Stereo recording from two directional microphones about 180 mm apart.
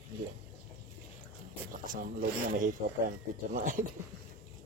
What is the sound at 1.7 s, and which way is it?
Speech, 50° right (ahead or behind).